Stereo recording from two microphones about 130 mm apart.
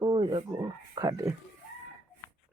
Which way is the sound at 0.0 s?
40° right (ahead or behind).